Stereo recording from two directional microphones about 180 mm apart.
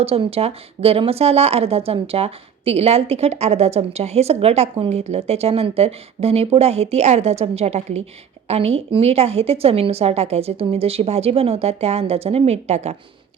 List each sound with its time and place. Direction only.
0.0 s speech: 35° right (ahead or behind)